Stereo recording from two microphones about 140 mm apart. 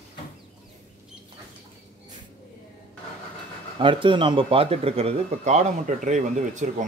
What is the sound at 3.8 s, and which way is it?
Speech, 35° right (ahead or behind).